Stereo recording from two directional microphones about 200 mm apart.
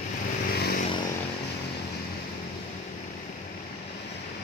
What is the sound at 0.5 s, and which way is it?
Vehicle, 50° left (ahead or behind).